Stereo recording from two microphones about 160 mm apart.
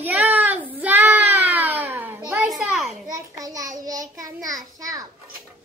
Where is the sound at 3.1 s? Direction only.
20° right (ahead or behind).